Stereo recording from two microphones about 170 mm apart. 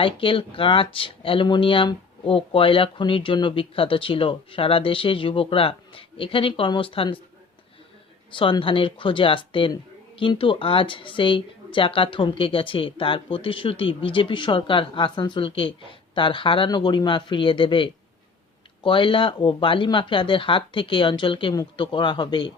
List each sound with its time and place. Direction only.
0.0 s speech: 30° left (ahead or behind)
8.3 s speech: 30° left (ahead or behind)